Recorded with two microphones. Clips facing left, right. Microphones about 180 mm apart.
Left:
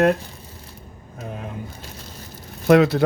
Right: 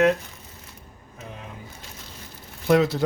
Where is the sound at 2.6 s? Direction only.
65° left (ahead or behind).